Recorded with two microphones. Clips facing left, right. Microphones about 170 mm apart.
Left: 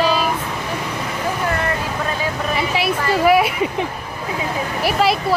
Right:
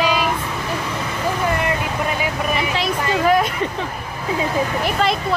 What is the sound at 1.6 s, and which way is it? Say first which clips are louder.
Vehicle: right 1 dB; 15° right (ahead or behind).